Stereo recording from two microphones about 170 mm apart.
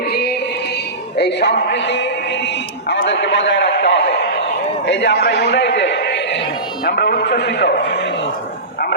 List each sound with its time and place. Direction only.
0.1 s music: 70° left (ahead or behind)
1.1 s music: 80° left
2.9 s a sound: 90° left
4.9 s a man's voice: 90° left